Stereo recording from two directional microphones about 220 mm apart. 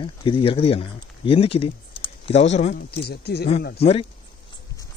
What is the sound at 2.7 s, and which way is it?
Speech, 45° left (ahead or behind).